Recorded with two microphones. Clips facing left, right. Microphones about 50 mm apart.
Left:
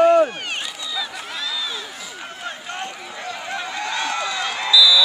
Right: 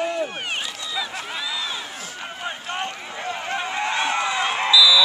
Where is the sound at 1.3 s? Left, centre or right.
Centre.